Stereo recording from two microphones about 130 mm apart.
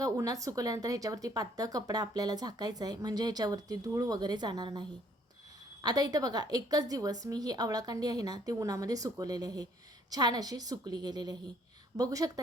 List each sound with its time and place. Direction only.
0.0 s a woman's voice: 25° right (ahead or behind)